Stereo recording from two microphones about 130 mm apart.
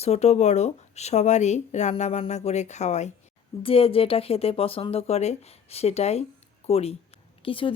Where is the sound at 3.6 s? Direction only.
45° left (ahead or behind).